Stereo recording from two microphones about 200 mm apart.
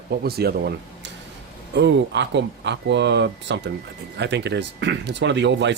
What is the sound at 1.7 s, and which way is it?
Speech, 60° right (ahead or behind).